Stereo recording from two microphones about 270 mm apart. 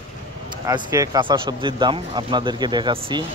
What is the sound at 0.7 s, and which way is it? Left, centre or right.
Speech, centre.